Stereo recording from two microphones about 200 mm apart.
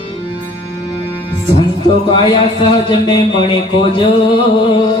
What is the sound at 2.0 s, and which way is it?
Speech, 25° left (ahead or behind).